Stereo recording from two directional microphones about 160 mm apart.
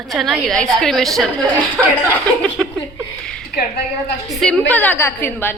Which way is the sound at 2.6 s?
Centre (ahead or behind).